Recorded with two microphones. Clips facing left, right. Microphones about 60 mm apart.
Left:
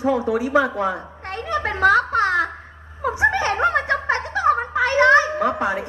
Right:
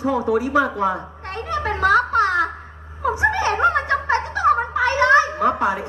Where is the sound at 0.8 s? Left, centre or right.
Right.